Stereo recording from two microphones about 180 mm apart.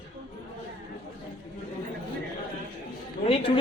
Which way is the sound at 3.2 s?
30° left (ahead or behind).